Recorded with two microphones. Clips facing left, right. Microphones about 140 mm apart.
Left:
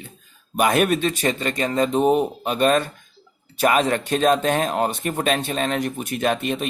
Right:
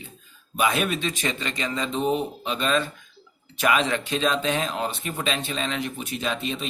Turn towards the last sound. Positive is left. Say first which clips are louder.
# left 6 dB
turn(degrees=55)  # may be behind; listen again after turning